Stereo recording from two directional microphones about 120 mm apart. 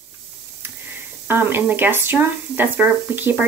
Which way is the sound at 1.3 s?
15° right (ahead or behind).